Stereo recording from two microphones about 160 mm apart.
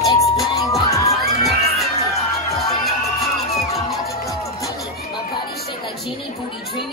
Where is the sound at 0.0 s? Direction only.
Centre (ahead or behind).